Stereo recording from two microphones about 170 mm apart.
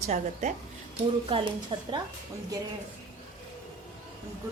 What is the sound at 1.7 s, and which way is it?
Speech, 30° right (ahead or behind).